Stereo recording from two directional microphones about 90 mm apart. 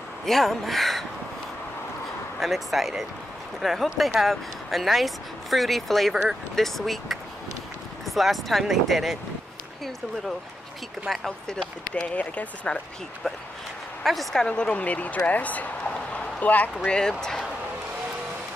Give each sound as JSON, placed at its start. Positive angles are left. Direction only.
{"t": 0.2, "sound": "speech", "side_deg": 0}
{"t": 2.4, "sound": "speech", "side_deg": 0}
{"t": 11.1, "sound": "speech", "side_deg": 5}
{"t": 14.0, "sound": "speech", "side_deg": 0}